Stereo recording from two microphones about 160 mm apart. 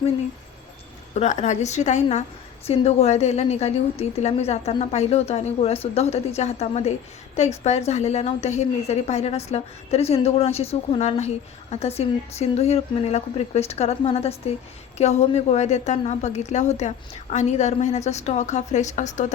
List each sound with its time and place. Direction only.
1.1 s a woman's voice: 45° left (ahead or behind)